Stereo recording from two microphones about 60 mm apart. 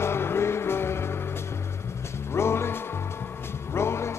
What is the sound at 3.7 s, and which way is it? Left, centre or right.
Music, left.